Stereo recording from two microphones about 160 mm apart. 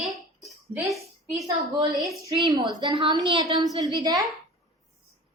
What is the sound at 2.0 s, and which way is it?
Speech, centre (ahead or behind).